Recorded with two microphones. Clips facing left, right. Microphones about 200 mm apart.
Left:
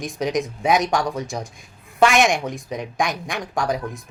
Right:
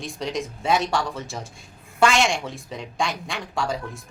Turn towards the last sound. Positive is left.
turn(degrees=15)  # may be behind; listen again after turning